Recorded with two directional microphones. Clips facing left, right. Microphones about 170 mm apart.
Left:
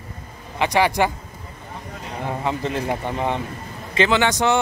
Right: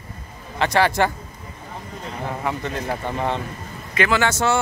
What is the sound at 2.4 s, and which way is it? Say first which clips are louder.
Speech: left 3 dB; 30° left (ahead or behind).